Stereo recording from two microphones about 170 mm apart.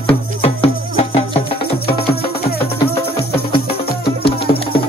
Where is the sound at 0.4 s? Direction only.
35° left (ahead or behind).